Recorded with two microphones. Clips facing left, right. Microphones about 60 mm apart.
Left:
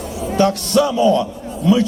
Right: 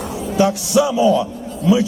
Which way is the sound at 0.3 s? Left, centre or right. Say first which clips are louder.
Even; centre.